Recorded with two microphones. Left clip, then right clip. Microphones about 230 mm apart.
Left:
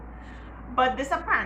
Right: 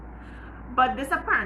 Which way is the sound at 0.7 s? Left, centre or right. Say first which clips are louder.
Right 1 dB; centre.